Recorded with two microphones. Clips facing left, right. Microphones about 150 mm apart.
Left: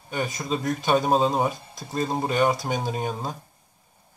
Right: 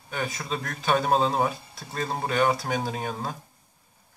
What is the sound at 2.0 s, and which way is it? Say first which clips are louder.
Speech: left 2 dB; 15° left (ahead or behind).